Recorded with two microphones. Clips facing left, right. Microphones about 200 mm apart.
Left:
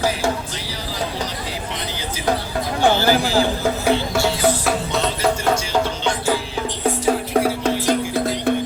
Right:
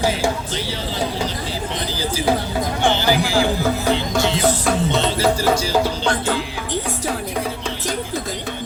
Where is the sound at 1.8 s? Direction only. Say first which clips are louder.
Right 5 dB; 30° right (ahead or behind).